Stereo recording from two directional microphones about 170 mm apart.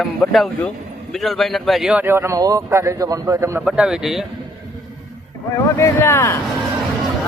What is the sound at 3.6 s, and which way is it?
Speech, 5° right (ahead or behind).